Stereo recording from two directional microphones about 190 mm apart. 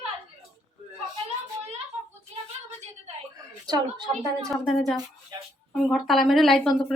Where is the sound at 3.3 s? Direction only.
20° right (ahead or behind).